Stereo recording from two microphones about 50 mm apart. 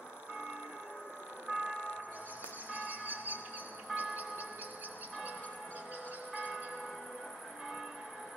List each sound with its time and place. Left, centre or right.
1.5 s vehicle: right
2.7 s music: right
3.9 s a sound: right